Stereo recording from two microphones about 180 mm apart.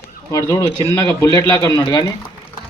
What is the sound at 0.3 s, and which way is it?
A man's voice, 20° left (ahead or behind).